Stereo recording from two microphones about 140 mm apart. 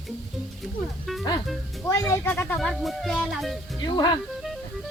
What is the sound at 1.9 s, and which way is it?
Speech, 20° left (ahead or behind).